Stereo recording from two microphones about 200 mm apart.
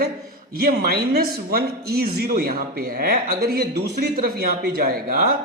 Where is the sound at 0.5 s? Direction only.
50° right (ahead or behind).